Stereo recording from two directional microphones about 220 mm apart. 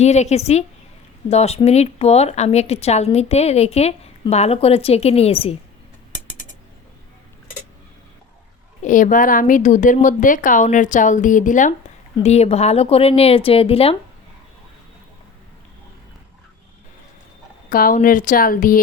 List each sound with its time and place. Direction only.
0.0 s speech: 30° left (ahead or behind)
8.8 s a woman's voice: 35° left (ahead or behind)
17.7 s a woman's voice: 40° left (ahead or behind)